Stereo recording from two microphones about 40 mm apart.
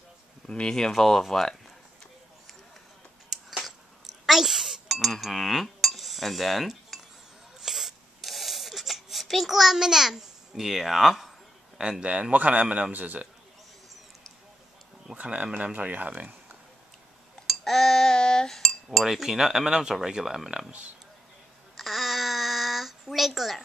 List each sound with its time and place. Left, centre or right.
0.5 s speech: centre
3.3 s a sound: centre
4.3 s wail: centre
4.8 s speech: centre
7.6 s a sound: centre
12.0 s speech: right
15.1 s speech: right
17.5 s a sound: centre
18.5 s chink: centre
18.9 s speech: centre
21.7 s babbling: centre